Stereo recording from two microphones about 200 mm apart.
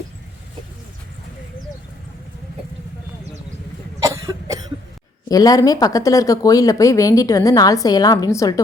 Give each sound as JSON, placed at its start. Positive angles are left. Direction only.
{"t": 4.0, "sound": "cough", "side_deg": -15}
{"t": 5.3, "sound": "speech", "side_deg": 20}